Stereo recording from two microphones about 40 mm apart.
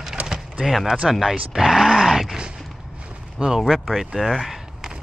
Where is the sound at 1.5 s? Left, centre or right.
Centre.